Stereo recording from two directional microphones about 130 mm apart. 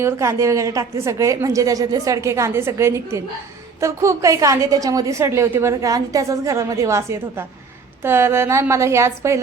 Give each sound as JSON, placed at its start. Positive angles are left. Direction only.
{"t": 0.0, "sound": "a woman's voice", "side_deg": -25}